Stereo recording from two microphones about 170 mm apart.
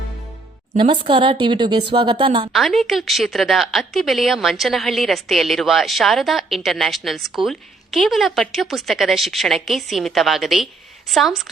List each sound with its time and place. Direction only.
0.8 s speech: 30° right (ahead or behind)
2.5 s a woman's voice: centre (ahead or behind)